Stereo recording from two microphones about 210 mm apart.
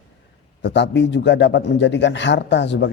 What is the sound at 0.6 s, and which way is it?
A man's voice, 55° left (ahead or behind).